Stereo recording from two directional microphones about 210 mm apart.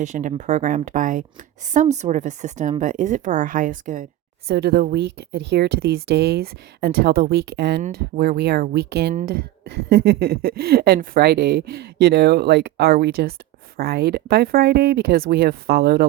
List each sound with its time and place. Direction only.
0.0 s speech: 35° right (ahead or behind)
4.4 s speech: 50° right (ahead or behind)
7.8 s speech: 35° right (ahead or behind)